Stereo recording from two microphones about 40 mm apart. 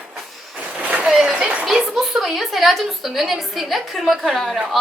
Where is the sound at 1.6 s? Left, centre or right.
Centre.